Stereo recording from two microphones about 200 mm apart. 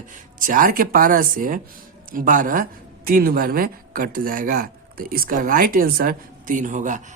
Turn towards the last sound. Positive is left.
turn(degrees=-40)  # may be behind; listen again after turning